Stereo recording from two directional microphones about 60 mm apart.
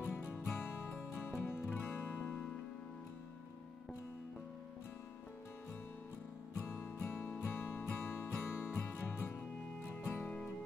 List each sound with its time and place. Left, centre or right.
0.1 s music: left
6.6 s music: left